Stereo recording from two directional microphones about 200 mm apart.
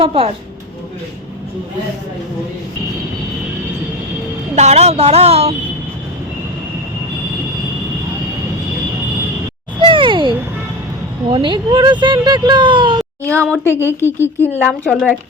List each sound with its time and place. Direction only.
0.0 s speech: 30° right (ahead or behind)
4.5 s a woman's voice: 35° right (ahead or behind)
9.8 s a sound: 25° right (ahead or behind)
11.3 s speech: 25° right (ahead or behind)
13.3 s speech: 5° left (ahead or behind)